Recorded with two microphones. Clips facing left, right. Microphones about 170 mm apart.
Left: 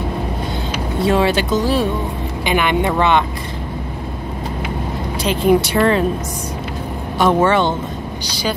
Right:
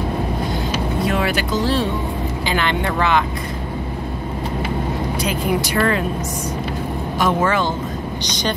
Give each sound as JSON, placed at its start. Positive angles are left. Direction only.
{"t": 1.0, "sound": "speech", "side_deg": 30}
{"t": 1.6, "sound": "speech", "side_deg": 10}
{"t": 5.2, "sound": "speech", "side_deg": 25}
{"t": 7.2, "sound": "speech", "side_deg": 25}